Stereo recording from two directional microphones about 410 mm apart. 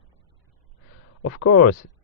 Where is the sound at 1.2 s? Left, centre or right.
Left.